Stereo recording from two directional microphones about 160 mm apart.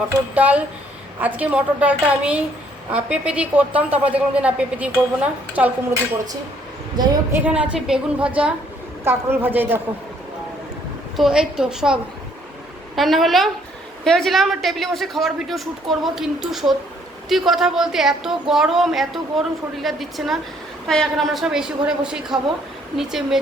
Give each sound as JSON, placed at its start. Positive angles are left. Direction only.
{"t": 0.3, "sound": "a woman's voice", "side_deg": -10}
{"t": 6.9, "sound": "a woman's voice", "side_deg": -25}
{"t": 7.3, "sound": "a woman's voice", "side_deg": -10}
{"t": 11.2, "sound": "a woman's voice", "side_deg": -5}
{"t": 13.0, "sound": "a woman's voice", "side_deg": 0}